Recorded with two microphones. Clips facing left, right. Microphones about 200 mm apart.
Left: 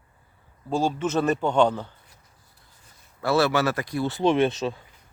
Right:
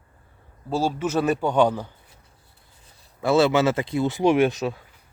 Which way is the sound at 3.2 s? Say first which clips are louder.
Right 3 dB; 20° right (ahead or behind).